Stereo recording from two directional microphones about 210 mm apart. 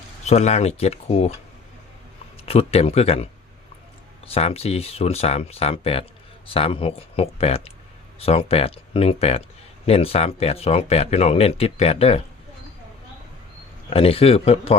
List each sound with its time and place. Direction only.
0.3 s speech: 30° left (ahead or behind)
2.5 s speech: 30° left (ahead or behind)
4.3 s speech: 30° left (ahead or behind)
13.9 s speech: 25° left (ahead or behind)